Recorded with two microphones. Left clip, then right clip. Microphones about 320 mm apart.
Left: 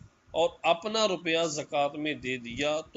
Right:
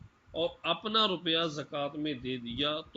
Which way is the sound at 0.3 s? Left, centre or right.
Left.